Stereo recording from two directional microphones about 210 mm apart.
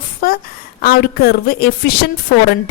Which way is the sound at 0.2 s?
45° left (ahead or behind).